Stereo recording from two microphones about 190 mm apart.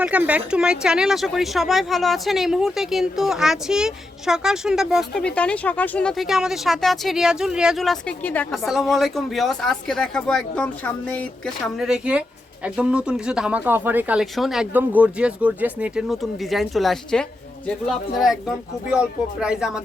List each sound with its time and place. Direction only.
0.0 s speech: 5° right (ahead or behind)